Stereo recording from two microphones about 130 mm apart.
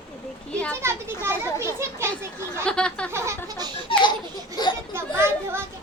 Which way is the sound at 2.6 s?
5° left (ahead or behind).